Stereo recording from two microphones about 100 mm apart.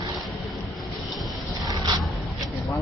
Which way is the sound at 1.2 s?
40° right (ahead or behind).